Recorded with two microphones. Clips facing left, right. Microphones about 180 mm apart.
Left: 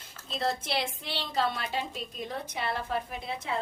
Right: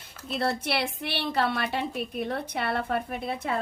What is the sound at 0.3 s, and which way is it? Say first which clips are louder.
A woman's voice: right 3 dB; 65° right (ahead or behind).